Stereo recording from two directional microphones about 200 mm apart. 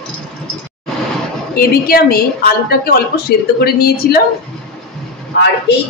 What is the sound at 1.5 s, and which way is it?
A woman's voice, 50° left (ahead or behind).